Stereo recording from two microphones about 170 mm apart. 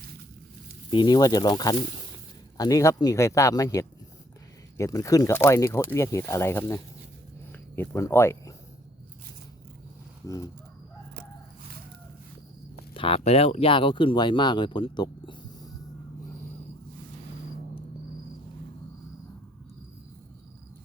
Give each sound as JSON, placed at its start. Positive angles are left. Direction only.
{"t": 0.9, "sound": "speech", "side_deg": 25}
{"t": 7.8, "sound": "speech", "side_deg": 15}
{"t": 12.9, "sound": "speech", "side_deg": 30}